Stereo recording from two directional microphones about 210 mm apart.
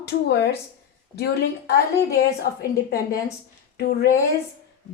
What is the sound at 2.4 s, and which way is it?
Speech, 45° left (ahead or behind).